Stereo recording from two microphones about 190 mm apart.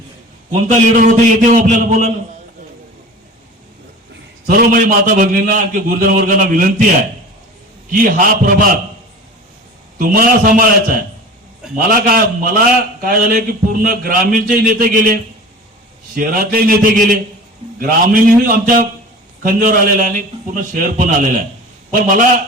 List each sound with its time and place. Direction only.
0.5 s a man's voice: 40° right (ahead or behind)
4.4 s a man's voice: 50° right (ahead or behind)
7.9 s a man's voice: 50° right (ahead or behind)
10.0 s a man's voice: 50° right (ahead or behind)